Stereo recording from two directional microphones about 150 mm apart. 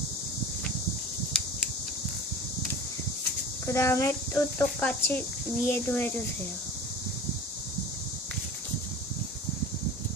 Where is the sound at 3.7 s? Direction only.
20° left (ahead or behind).